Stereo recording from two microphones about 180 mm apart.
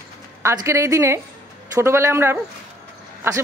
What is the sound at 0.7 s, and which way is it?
A man's voice, 15° right (ahead or behind).